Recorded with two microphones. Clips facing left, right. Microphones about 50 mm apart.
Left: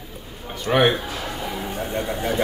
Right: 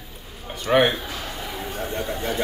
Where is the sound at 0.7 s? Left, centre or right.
Centre.